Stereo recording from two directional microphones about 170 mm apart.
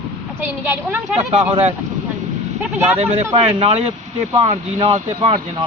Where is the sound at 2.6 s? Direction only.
10° right (ahead or behind).